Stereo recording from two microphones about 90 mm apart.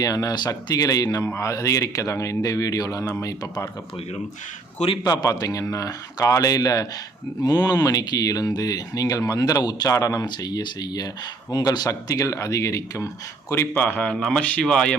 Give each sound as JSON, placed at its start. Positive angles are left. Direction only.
{"t": 0.0, "sound": "speech", "side_deg": 40}
{"t": 1.2, "sound": "speech", "side_deg": 30}
{"t": 5.0, "sound": "speech", "side_deg": 40}
{"t": 10.2, "sound": "speech", "side_deg": 50}
{"t": 11.9, "sound": "speech", "side_deg": 35}
{"t": 13.7, "sound": "a man's voice", "side_deg": 20}
{"t": 14.1, "sound": "speech", "side_deg": 10}